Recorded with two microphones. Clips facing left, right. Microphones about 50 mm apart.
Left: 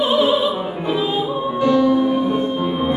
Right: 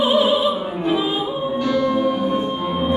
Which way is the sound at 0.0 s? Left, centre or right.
Centre.